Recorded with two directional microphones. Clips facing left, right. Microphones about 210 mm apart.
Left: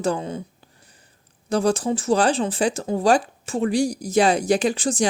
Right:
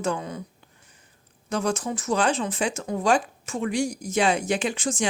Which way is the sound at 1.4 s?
35° left (ahead or behind).